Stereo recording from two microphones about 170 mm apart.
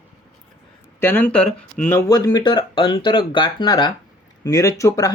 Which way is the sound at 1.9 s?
20° left (ahead or behind).